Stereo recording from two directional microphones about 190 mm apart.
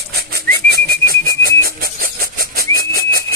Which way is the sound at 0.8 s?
50° right (ahead or behind).